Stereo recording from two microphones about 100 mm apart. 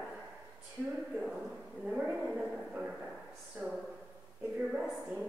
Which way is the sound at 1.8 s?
5° right (ahead or behind).